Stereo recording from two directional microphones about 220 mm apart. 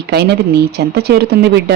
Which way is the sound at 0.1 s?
45° right (ahead or behind).